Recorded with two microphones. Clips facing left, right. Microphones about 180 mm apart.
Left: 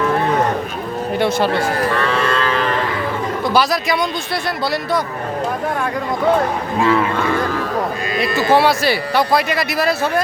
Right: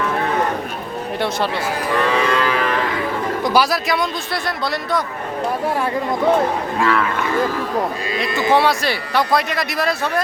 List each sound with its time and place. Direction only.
1.7 s livestock: 15° right (ahead or behind)
3.4 s speech: 10° right (ahead or behind)
6.7 s a man's voice: 25° left (ahead or behind)
8.3 s speech: 20° right (ahead or behind)
8.5 s speech: 5° left (ahead or behind)